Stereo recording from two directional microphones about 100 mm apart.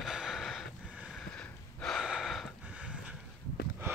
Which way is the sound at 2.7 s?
10° right (ahead or behind).